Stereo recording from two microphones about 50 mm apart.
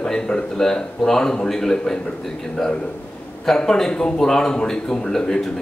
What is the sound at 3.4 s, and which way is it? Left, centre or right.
A man's voice, centre.